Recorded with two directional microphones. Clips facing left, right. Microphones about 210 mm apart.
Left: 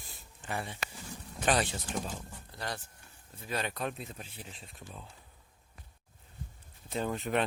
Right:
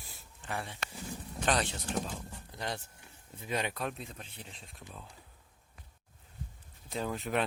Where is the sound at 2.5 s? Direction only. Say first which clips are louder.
Right 1 dB; 20° right (ahead or behind).